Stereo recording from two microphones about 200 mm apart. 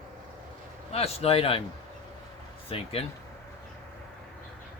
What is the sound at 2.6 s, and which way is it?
Speech, 30° left (ahead or behind).